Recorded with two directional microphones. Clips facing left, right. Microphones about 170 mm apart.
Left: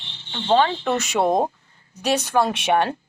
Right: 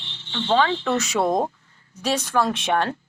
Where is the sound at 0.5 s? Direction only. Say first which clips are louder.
Left 1 dB; 20° left (ahead or behind).